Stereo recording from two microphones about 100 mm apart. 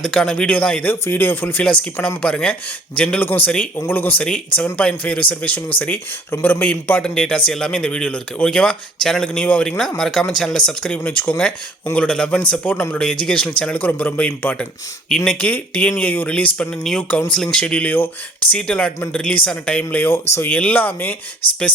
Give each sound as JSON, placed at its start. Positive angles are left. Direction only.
{"t": 0.0, "sound": "a man's voice", "side_deg": 5}
{"t": 20.5, "sound": "a man's voice", "side_deg": 15}